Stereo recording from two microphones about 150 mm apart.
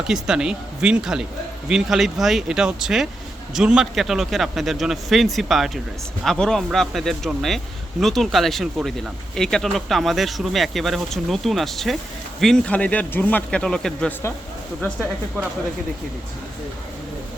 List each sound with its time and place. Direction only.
0.1 s a man's voice: 5° right (ahead or behind)